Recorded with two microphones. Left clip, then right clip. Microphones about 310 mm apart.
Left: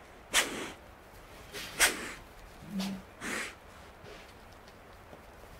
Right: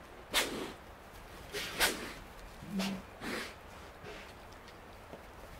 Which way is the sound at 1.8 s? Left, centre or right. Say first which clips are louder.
Left 5 dB; left.